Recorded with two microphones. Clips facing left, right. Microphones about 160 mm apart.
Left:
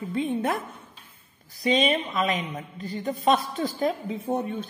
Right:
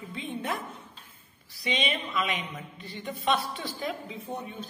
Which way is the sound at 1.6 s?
45° left (ahead or behind).